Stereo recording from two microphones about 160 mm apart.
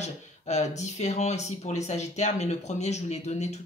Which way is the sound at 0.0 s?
45° left (ahead or behind).